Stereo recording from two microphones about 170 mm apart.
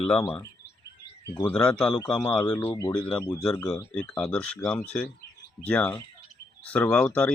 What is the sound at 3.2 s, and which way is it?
Speech, 20° left (ahead or behind).